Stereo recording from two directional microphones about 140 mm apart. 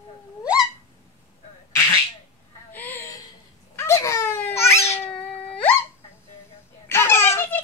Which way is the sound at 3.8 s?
20° left (ahead or behind).